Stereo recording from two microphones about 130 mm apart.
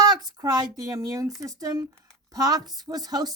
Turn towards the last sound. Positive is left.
turn(degrees=-30)  # may be behind; listen again after turning